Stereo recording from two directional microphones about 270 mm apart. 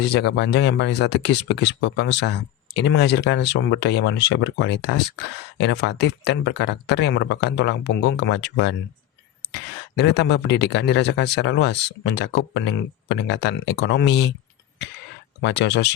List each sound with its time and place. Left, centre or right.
0.1 s speech: left
15.4 s speech: left